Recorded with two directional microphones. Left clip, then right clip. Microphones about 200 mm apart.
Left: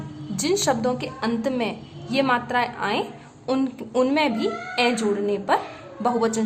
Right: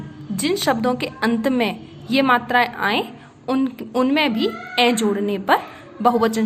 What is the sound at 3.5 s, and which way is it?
A woman's voice, 5° right (ahead or behind).